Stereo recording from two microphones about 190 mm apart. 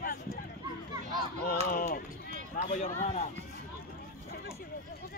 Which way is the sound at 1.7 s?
50° left (ahead or behind).